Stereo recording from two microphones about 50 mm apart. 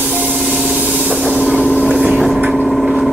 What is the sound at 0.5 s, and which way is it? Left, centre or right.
Spray, centre.